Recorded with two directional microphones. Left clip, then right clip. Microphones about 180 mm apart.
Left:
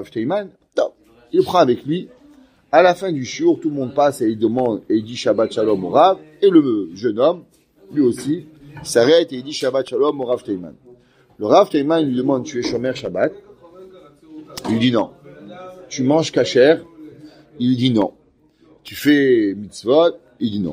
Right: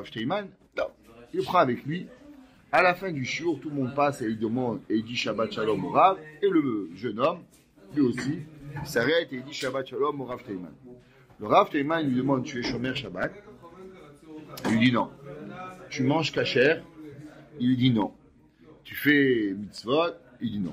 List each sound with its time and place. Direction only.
0.0 s a man's voice: 35° left (ahead or behind)
8.9 s a man's voice: 45° left (ahead or behind)
11.4 s a man's voice: 35° left (ahead or behind)
14.8 s a man's voice: 35° left (ahead or behind)